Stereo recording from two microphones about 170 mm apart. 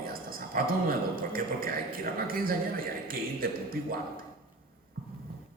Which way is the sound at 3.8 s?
55° right (ahead or behind).